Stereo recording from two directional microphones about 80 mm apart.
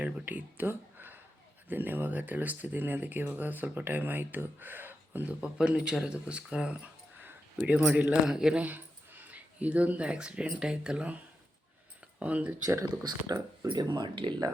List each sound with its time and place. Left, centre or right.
0.0 s speech: right
5.4 s speech: centre
7.6 s speech: centre
8.6 s speech: centre
12.2 s speech: centre
12.8 s speech: right
13.7 s speech: right